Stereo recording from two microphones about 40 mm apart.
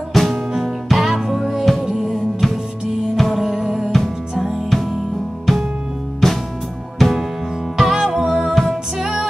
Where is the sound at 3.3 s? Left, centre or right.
Centre.